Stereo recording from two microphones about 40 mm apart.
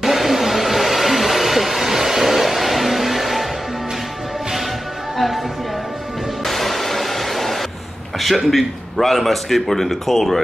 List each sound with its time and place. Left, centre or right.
0.0 s hair dryer: centre
5.1 s music: centre
6.4 s music: centre
8.5 s a man's voice: centre